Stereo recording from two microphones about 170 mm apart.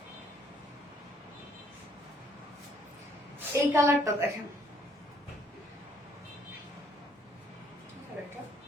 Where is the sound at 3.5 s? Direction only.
15° right (ahead or behind).